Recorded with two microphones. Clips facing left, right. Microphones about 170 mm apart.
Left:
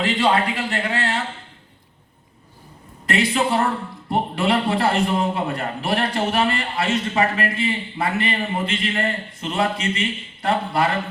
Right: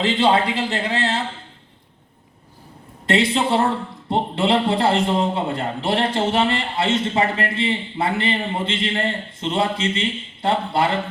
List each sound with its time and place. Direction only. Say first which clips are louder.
0.0 s a man's voice: right 2 dB; 25° right (ahead or behind)
3.1 s a man's voice: right 2 dB; 25° right (ahead or behind)